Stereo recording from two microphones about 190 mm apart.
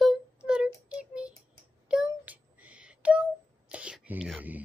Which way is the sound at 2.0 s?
10° right (ahead or behind).